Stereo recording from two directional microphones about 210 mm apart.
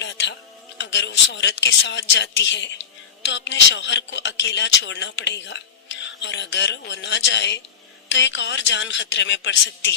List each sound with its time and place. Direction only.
0.8 s speech: 55° left (ahead or behind)